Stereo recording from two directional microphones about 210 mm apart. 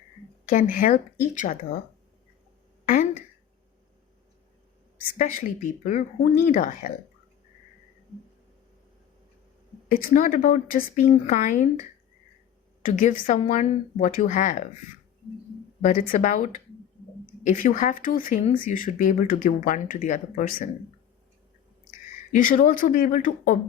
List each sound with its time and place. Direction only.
0.5 s speech: 40° left (ahead or behind)
2.9 s a sound: 40° left (ahead or behind)
5.1 s speech: 40° left (ahead or behind)
9.9 s speech: 40° left (ahead or behind)
15.8 s speech: 35° left (ahead or behind)
22.3 s speech: 40° left (ahead or behind)